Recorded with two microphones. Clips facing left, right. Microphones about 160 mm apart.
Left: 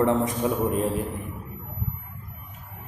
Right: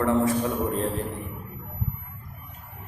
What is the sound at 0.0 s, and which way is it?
Speech, 20° left (ahead or behind).